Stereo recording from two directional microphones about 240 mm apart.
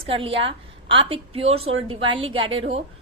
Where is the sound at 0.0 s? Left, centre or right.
Right.